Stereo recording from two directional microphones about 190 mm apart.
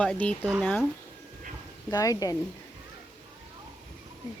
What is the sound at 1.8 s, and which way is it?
Speech, 20° left (ahead or behind).